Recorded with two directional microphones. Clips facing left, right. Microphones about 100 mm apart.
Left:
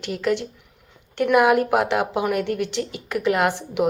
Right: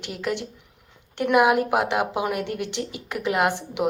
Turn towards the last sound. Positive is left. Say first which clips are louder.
# left 2 dB
turn(degrees=-15)  # may be behind; listen again after turning